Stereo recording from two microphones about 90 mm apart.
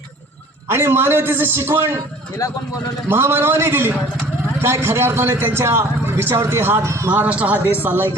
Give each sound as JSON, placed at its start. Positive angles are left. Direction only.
{"t": 0.7, "sound": "a man's voice", "side_deg": -25}
{"t": 2.4, "sound": "a man's voice", "side_deg": 35}
{"t": 3.1, "sound": "a man's voice", "side_deg": -25}
{"t": 7.1, "sound": "a man's voice", "side_deg": -15}